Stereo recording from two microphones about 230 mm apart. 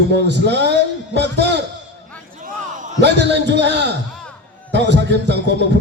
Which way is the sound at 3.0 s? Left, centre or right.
Right.